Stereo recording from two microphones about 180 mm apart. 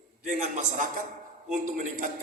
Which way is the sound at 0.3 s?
45° right (ahead or behind).